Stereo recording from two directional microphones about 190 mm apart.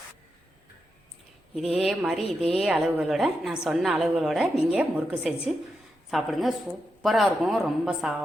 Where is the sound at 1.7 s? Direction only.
Centre (ahead or behind).